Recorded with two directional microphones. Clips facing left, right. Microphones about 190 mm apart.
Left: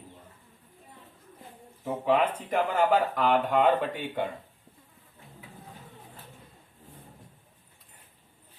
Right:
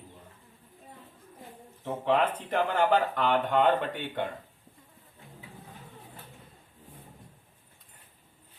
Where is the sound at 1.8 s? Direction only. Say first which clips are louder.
Left 1 dB; 5° left (ahead or behind).